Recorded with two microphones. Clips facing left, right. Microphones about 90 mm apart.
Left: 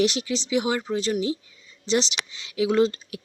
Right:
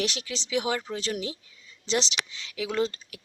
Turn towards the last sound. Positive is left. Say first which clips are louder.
# left 7 dB
turn(degrees=20)  # may be behind; listen again after turning